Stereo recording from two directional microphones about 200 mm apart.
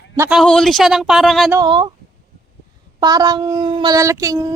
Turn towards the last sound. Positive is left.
turn(degrees=-15)  # may be behind; listen again after turning